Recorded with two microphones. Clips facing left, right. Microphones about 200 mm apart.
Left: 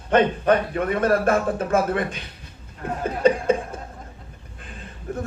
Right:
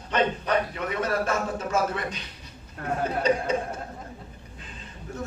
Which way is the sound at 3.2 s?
55° left (ahead or behind).